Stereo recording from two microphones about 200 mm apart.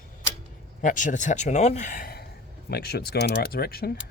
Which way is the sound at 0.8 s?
40° left (ahead or behind).